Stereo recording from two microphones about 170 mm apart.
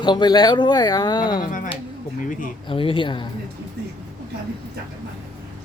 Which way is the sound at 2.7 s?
30° left (ahead or behind).